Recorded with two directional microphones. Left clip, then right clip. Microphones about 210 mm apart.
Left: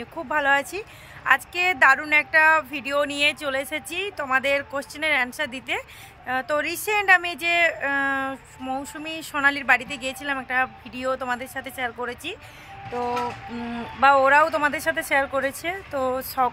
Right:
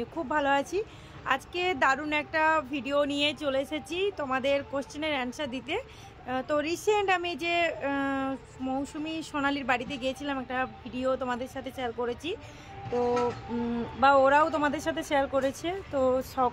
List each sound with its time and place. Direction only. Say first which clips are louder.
0.3 s a woman's voice: left 6 dB; centre (ahead or behind)
12.9 s music: left 1 dB; 15° left (ahead or behind)
13.6 s a woman's voice: left 5 dB; 5° left (ahead or behind)